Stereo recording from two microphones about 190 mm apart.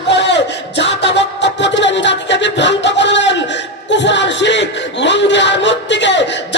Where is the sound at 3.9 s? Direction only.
70° left (ahead or behind).